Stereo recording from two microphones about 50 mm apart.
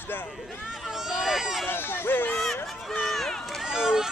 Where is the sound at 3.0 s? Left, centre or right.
Centre.